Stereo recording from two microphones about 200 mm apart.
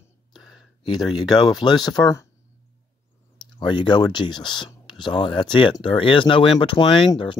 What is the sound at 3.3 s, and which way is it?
Speech, 20° left (ahead or behind).